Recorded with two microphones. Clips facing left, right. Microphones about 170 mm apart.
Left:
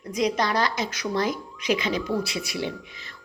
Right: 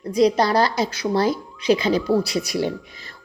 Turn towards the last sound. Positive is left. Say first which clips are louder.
# right 6 dB
turn(degrees=-40)  # may be behind; listen again after turning